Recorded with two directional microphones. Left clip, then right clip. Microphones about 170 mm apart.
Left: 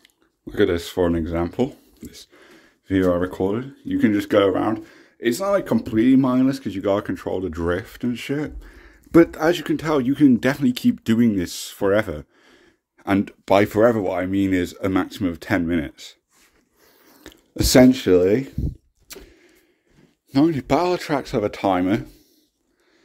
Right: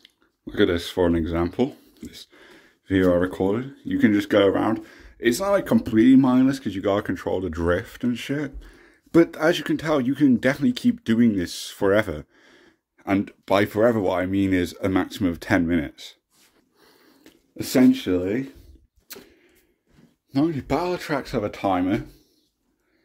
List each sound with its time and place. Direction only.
0.0 s speech: 10° left (ahead or behind)
13.0 s speech: 20° left (ahead or behind)
14.2 s speech: 5° left (ahead or behind)
17.2 s speech: 35° left (ahead or behind)
19.0 s vehicle: 30° left (ahead or behind)
20.2 s speech: 50° left (ahead or behind)
21.0 s speech: 20° left (ahead or behind)
21.5 s speech: 40° left (ahead or behind)